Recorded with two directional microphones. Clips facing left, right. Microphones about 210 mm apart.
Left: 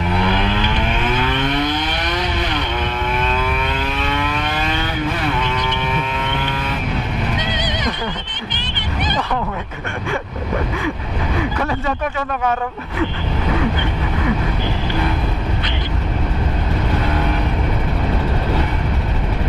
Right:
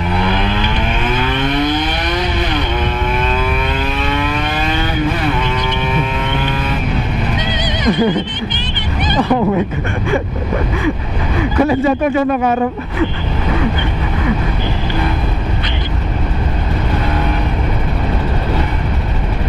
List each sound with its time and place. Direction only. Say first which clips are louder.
0.2 s vehicle: right 2 dB; 10° right (ahead or behind)
7.3 s music: right 3 dB; 10° right (ahead or behind)
9.1 s speech: right 11 dB; 10° right (ahead or behind)